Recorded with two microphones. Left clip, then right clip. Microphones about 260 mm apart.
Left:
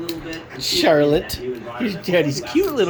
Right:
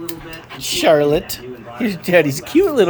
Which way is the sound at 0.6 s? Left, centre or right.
Right.